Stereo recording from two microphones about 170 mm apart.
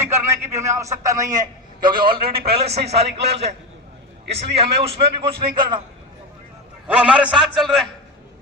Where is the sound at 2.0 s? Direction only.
30° right (ahead or behind).